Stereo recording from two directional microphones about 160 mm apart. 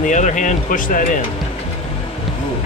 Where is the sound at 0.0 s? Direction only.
50° left (ahead or behind).